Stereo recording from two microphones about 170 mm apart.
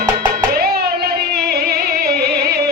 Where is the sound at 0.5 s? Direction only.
65° right (ahead or behind).